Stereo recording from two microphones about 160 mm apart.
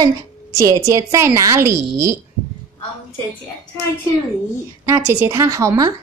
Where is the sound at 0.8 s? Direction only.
20° right (ahead or behind).